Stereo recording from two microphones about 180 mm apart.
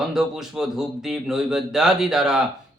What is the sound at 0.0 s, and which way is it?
Speech, 5° right (ahead or behind).